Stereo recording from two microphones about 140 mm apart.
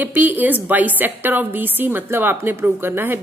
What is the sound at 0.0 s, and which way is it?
A woman's voice, 10° right (ahead or behind).